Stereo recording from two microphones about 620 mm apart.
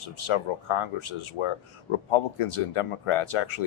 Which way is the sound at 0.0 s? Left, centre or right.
Left.